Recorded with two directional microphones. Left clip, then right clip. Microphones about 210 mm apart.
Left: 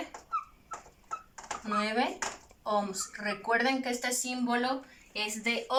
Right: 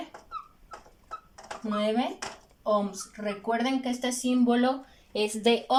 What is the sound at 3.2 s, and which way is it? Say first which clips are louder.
Speech: even; 15° right (ahead or behind).